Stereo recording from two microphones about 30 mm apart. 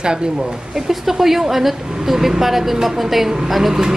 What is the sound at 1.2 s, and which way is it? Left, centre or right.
A woman's voice, centre.